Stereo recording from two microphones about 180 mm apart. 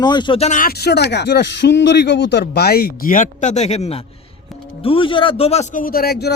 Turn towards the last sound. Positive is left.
turn(degrees=60)  # may be behind; listen again after turning